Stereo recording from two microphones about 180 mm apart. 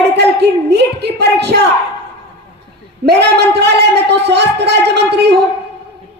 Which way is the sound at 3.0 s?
65° right (ahead or behind).